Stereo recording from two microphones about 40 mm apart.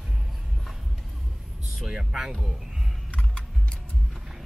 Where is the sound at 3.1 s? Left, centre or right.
Left.